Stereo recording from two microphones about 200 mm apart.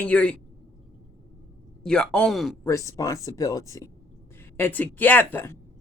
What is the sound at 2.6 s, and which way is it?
Speech, 15° left (ahead or behind).